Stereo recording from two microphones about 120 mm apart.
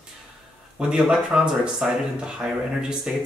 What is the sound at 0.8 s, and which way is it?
Speech, 5° right (ahead or behind).